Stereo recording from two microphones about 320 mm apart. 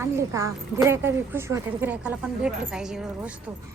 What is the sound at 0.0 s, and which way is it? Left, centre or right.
A woman's voice, centre.